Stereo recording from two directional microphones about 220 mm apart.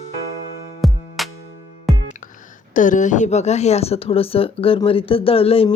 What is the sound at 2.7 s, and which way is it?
Speech, 35° left (ahead or behind).